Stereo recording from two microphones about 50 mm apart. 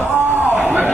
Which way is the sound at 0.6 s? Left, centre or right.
Right.